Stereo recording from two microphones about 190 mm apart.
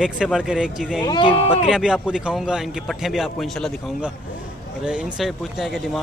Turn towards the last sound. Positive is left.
turn(degrees=0)  # may be behind; listen again after turning